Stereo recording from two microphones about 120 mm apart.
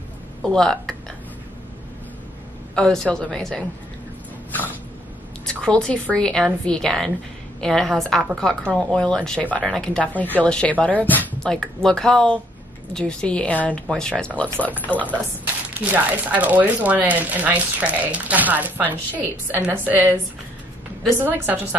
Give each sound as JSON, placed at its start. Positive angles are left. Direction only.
{"t": 0.4, "sound": "a woman's voice", "side_deg": 5}
{"t": 2.7, "sound": "a woman's voice", "side_deg": 5}
{"t": 4.5, "sound": "a sound", "side_deg": 15}
{"t": 5.4, "sound": "a woman's voice", "side_deg": 5}
{"t": 15.8, "sound": "speech", "side_deg": -15}
{"t": 21.2, "sound": "speech", "side_deg": -15}